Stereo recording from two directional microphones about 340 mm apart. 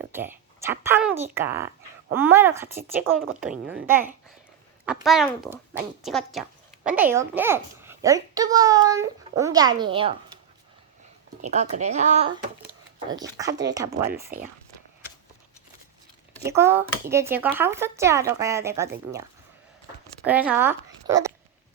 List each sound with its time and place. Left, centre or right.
0.1 s a child's voice: centre
11.4 s a woman's voice: centre
16.4 s a child's voice: centre
20.2 s speech: centre